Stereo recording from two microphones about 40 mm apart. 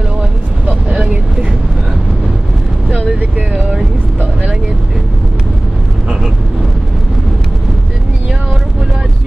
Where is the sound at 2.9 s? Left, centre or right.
Right.